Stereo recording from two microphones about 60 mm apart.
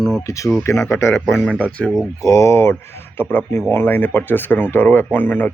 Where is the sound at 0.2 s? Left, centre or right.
Left.